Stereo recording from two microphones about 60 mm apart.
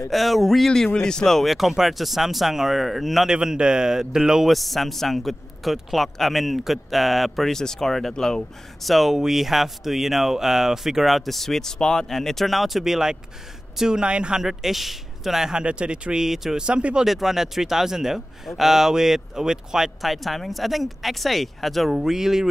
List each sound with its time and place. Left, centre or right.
0.1 s a man's voice: centre
3.3 s a man's voice: centre
8.9 s a man's voice: centre
14.4 s a man's voice: centre
17.0 s a man's voice: centre